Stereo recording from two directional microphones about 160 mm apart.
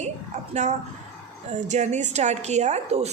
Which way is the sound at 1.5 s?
50° right (ahead or behind).